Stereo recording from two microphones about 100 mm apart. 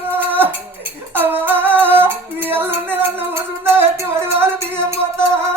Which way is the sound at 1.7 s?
20° right (ahead or behind).